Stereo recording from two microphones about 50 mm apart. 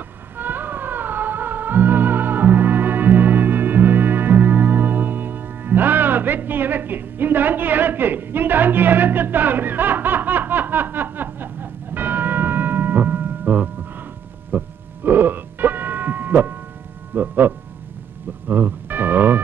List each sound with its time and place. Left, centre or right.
0.4 s music: right
14.5 s a sound: right
15.0 s music: right